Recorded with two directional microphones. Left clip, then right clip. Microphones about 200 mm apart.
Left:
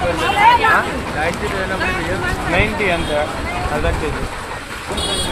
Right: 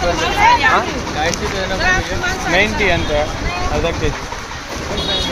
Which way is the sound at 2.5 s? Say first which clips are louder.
Right 3 dB; 20° right (ahead or behind).